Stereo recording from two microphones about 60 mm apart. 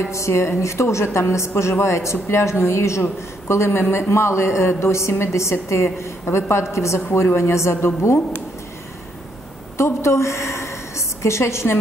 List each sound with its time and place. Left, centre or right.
0.1 s a woman's voice: left
9.8 s a woman's voice: left